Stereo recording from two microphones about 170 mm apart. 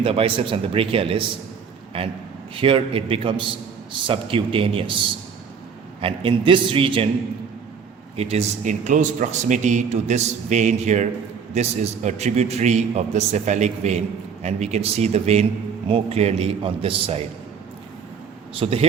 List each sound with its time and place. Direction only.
0.0 s a man's voice: 35° right (ahead or behind)
6.0 s a man's voice: 30° right (ahead or behind)
8.1 s a man's voice: 35° right (ahead or behind)
18.5 s a man's voice: 35° right (ahead or behind)